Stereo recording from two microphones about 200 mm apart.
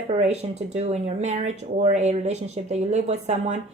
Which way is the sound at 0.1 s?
35° right (ahead or behind).